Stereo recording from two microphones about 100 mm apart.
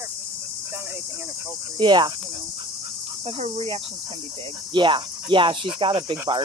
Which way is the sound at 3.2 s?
75° right (ahead or behind).